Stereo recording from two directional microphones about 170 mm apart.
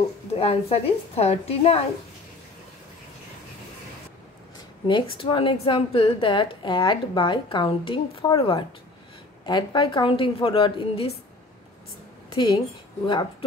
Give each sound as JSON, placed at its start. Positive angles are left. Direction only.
{"t": 0.3, "sound": "speech", "side_deg": 35}
{"t": 4.8, "sound": "a woman's voice", "side_deg": 30}
{"t": 12.4, "sound": "a woman's voice", "side_deg": 25}